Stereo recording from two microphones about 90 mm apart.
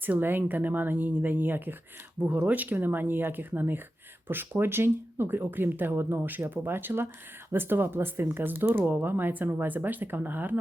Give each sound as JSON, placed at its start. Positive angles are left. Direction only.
{"t": 0.0, "sound": "speech", "side_deg": -20}